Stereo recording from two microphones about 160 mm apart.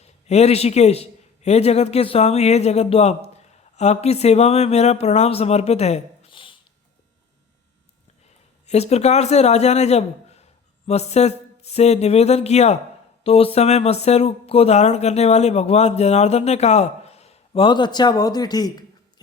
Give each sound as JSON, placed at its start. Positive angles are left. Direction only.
{"t": 0.0, "sound": "speech", "side_deg": 40}
{"t": 8.6, "sound": "speech", "side_deg": 40}